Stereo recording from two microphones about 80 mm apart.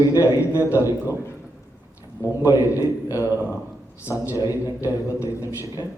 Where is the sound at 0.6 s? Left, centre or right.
Left.